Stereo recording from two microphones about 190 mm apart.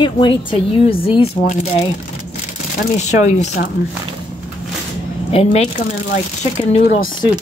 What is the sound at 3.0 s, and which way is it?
Speech, 40° left (ahead or behind).